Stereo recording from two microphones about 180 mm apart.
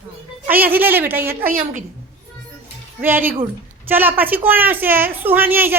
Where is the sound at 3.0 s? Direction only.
10° right (ahead or behind).